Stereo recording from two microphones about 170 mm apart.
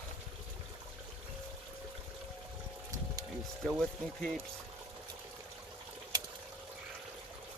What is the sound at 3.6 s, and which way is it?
Speech, centre (ahead or behind).